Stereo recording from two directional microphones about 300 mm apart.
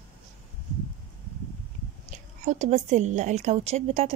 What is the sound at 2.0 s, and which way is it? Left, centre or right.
A woman's voice, right.